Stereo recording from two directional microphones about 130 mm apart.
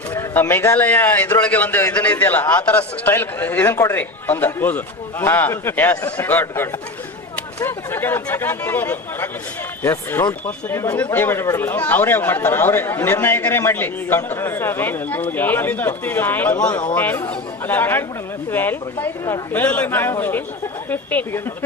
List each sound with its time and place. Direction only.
0.1 s speech: 15° left (ahead or behind)